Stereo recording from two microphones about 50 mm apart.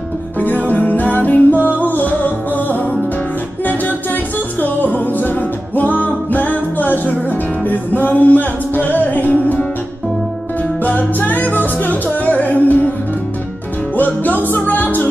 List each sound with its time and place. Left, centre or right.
0.4 s music: left
4.6 s music: left
10.8 s music: left
13.9 s music: left